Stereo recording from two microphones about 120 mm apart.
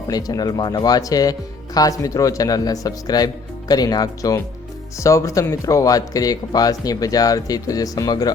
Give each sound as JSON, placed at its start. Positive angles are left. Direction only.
{"t": 0.1, "sound": "speech", "side_deg": 30}